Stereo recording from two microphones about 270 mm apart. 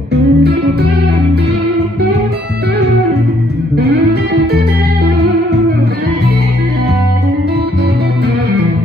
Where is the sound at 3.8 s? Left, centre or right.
Right.